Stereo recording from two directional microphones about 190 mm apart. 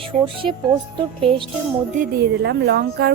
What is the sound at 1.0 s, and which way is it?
Music, 25° right (ahead or behind).